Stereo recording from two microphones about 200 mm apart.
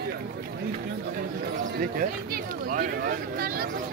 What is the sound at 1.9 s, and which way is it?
Speech, 45° right (ahead or behind).